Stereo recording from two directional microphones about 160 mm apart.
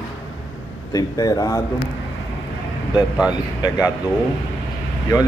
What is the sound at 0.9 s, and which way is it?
Speech, 20° left (ahead or behind).